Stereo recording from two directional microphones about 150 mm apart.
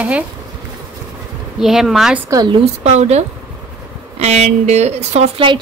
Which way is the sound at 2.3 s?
25° right (ahead or behind).